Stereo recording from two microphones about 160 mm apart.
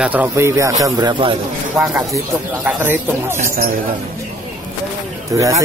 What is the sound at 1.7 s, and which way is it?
Speech, 20° right (ahead or behind).